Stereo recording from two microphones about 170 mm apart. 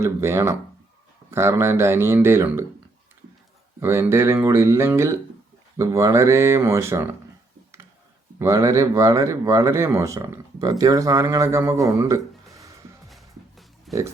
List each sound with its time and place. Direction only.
0.0 s speech: 15° right (ahead or behind)
3.8 s speech: 15° right (ahead or behind)
8.4 s speech: 15° right (ahead or behind)
13.1 s music: centre (ahead or behind)